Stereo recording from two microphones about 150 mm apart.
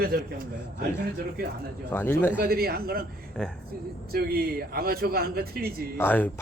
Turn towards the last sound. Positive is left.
turn(degrees=10)  # may be behind; listen again after turning